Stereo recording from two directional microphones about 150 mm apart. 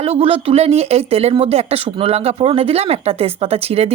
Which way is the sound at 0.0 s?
40° right (ahead or behind).